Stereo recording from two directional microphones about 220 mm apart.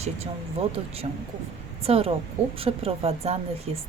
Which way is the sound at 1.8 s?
25° right (ahead or behind).